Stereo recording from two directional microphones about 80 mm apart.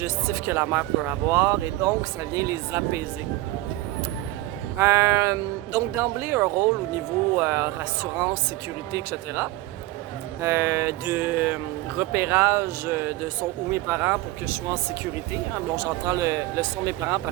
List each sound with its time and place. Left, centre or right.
0.0 s speech: right
1.3 s speech: right
4.8 s speech: right
8.9 s speech: right; by 12.0 s centre
12.1 s speech: right
15.3 s speech: right